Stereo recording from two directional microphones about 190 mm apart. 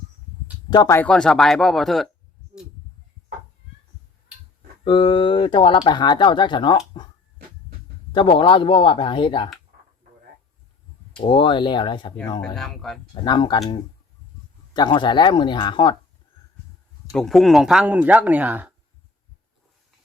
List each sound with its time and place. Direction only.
0.7 s speech: 20° left (ahead or behind); by 2.0 s centre (ahead or behind)
4.9 s speech: 25° left (ahead or behind)
8.1 s speech: 25° left (ahead or behind)
11.2 s speech: 25° left (ahead or behind)
12.5 s speech: centre (ahead or behind)
13.2 s speech: 25° left (ahead or behind)
17.1 s speech: centre (ahead or behind)